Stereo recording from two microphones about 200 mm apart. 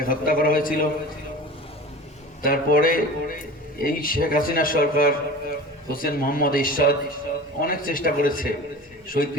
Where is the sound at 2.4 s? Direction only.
45° left (ahead or behind).